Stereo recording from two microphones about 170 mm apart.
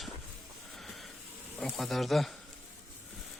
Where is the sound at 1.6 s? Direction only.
Centre (ahead or behind).